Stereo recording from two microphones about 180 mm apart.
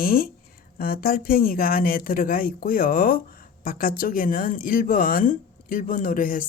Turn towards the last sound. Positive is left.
turn(degrees=50)  # may be behind; listen again after turning